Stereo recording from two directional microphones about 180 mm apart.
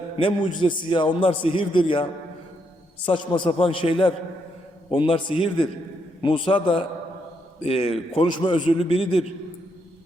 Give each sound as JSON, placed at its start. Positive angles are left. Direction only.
{"t": 0.2, "sound": "a man's voice", "side_deg": 30}
{"t": 3.1, "sound": "a man's voice", "side_deg": 30}